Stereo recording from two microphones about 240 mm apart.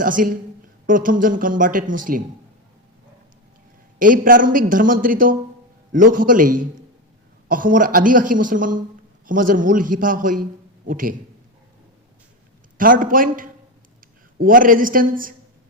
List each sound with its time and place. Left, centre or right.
0.0 s a man's voice: right
3.9 s a man's voice: right
12.7 s a man's voice: right